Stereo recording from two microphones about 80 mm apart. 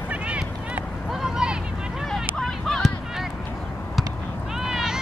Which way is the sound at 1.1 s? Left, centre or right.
Centre.